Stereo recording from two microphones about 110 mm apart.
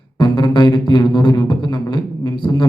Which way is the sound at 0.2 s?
45° left (ahead or behind).